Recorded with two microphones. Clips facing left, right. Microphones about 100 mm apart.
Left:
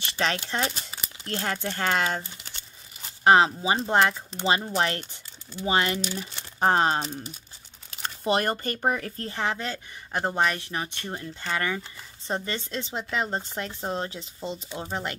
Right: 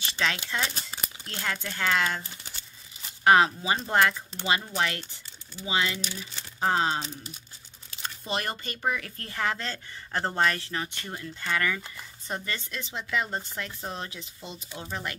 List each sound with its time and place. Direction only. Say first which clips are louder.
0.2 s speech: left 3 dB; 40° left (ahead or behind)
3.3 s speech: left 2 dB; 25° left (ahead or behind)
5.6 s speech: left 4 dB; 50° left (ahead or behind)
9.1 s speech: left 2 dB; 25° left (ahead or behind)